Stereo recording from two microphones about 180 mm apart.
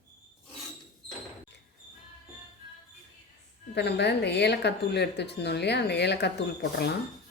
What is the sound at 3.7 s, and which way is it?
Speech, 65° left (ahead or behind).